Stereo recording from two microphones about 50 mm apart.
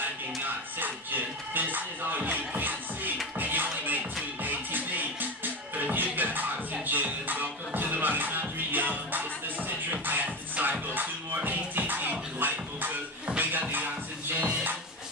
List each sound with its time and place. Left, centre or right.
0.0 s music: right